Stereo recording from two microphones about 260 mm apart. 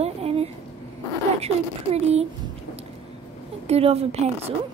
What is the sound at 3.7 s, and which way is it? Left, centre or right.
Speech, right.